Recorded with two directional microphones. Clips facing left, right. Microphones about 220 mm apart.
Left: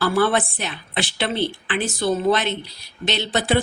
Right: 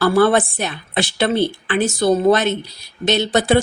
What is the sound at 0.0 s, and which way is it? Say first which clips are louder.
A woman's voice: right 5 dB; 50° right (ahead or behind).